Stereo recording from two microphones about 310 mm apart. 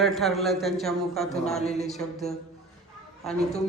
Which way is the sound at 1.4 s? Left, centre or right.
Left.